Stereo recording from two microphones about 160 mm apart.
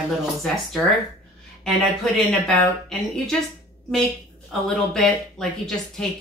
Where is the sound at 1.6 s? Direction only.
5° left (ahead or behind).